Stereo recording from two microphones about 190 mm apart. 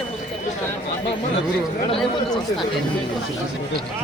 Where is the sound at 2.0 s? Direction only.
Centre (ahead or behind).